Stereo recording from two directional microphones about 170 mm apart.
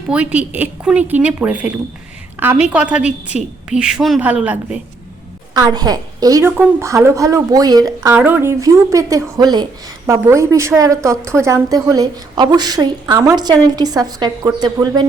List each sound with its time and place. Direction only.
0.1 s a woman's voice: 10° right (ahead or behind)
5.5 s a woman's voice: 20° right (ahead or behind)
8.1 s a woman's voice: 10° right (ahead or behind)